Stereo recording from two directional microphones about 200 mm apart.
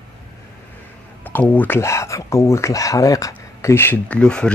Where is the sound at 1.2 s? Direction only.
10° left (ahead or behind).